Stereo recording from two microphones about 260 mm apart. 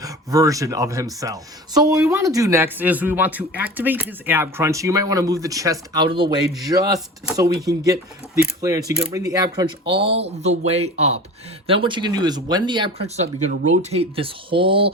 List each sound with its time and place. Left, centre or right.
0.0 s speech: centre